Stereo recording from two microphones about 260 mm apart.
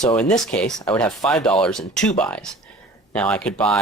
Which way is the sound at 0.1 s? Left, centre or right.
Centre.